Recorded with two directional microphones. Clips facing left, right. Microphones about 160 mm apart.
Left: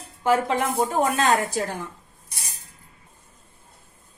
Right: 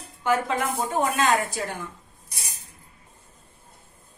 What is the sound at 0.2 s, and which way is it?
Speech, 30° left (ahead or behind).